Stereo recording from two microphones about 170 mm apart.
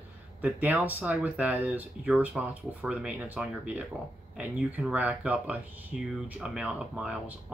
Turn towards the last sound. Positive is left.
turn(degrees=-5)  # may be behind; listen again after turning